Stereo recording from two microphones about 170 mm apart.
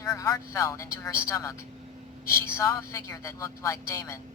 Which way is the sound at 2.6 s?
20° left (ahead or behind).